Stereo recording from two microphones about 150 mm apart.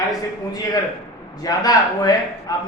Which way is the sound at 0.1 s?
25° left (ahead or behind).